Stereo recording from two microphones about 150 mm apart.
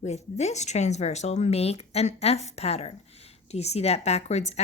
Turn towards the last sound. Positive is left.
turn(degrees=50)  # may be behind; listen again after turning